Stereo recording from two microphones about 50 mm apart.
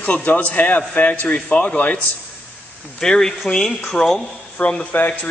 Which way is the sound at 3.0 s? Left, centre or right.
Centre.